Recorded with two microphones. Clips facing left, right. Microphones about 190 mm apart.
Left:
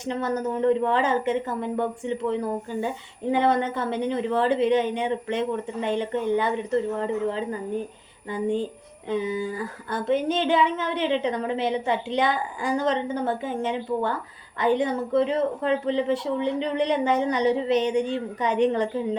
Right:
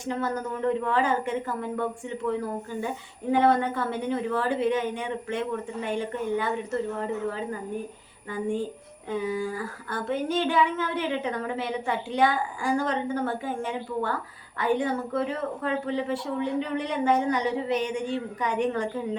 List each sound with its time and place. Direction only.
0.0 s speech: 20° left (ahead or behind)
8.3 s speech: 20° left (ahead or behind)